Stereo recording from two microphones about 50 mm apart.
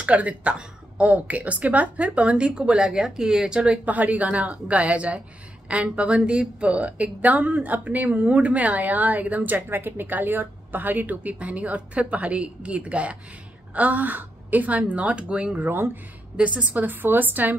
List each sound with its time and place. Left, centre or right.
0.0 s a woman's voice: right
3.8 s a woman's voice: right
15.6 s a woman's voice: right
16.3 s a woman's voice: right